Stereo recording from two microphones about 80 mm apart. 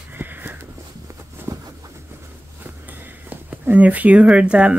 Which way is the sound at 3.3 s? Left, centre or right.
Right.